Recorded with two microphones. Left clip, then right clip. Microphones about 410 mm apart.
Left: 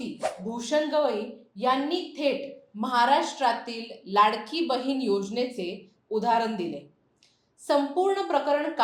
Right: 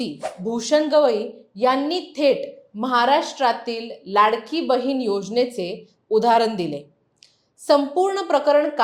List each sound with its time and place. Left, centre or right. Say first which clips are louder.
0.2 s speech: even; centre
0.4 s a woman's voice: right 9 dB; right